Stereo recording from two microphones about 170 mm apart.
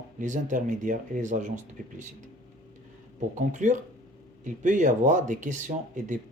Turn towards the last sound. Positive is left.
turn(degrees=-45)  # may be behind; listen again after turning